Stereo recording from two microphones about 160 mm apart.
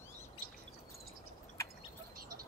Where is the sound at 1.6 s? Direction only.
20° left (ahead or behind).